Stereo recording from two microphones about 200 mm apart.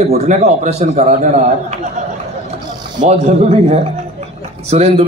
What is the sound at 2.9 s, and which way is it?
A man's voice, 35° right (ahead or behind).